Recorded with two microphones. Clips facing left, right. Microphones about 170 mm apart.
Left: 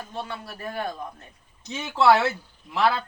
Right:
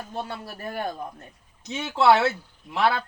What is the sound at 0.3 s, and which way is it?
Speech, 40° right (ahead or behind).